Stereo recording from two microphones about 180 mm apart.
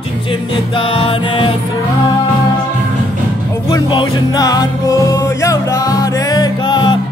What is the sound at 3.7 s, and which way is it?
Music, 25° left (ahead or behind).